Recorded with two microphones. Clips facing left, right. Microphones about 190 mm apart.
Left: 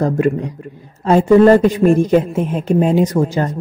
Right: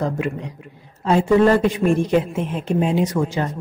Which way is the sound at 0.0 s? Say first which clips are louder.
Left 8 dB; 45° left (ahead or behind).